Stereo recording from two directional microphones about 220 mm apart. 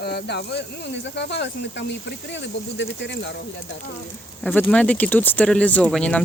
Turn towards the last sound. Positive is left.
turn(degrees=5)  # may be behind; listen again after turning